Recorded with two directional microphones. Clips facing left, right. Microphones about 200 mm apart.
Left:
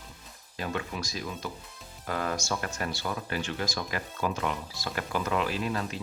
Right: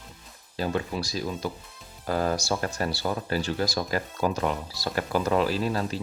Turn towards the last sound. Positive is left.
turn(degrees=-35)  # may be behind; listen again after turning